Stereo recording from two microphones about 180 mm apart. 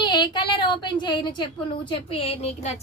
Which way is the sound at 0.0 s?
25° left (ahead or behind).